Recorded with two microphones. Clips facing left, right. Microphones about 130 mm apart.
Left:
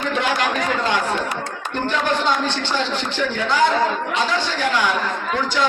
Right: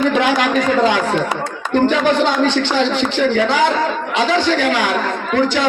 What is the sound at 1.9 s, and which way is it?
Speech, 90° right.